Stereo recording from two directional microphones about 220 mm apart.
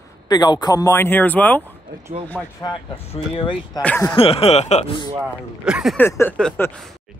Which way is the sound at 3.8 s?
5° left (ahead or behind).